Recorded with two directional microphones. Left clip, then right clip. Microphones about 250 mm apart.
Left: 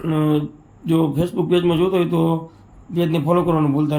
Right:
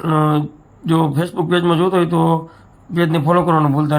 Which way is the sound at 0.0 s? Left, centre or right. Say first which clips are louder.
Right 3 dB; right.